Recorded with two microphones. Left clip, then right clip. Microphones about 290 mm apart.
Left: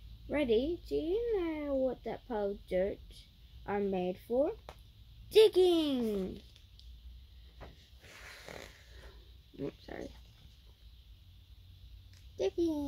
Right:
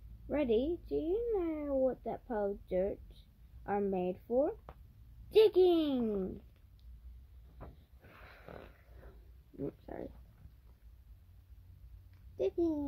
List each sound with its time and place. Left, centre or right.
0.3 s speech: centre
7.5 s snoring: centre
9.6 s speech: centre
12.4 s speech: centre